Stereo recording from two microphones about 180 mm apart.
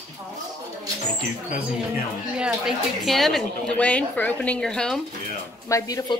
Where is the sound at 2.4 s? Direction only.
Centre (ahead or behind).